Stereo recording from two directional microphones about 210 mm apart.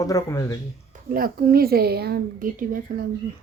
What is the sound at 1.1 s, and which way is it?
A woman's voice, 45° right (ahead or behind).